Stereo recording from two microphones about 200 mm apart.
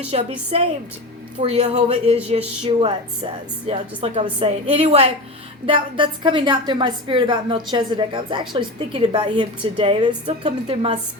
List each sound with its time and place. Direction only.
0.1 s a woman's voice: 30° right (ahead or behind)